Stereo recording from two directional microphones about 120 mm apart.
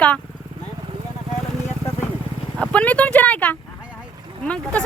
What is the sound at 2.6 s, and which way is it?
Speech, 10° left (ahead or behind).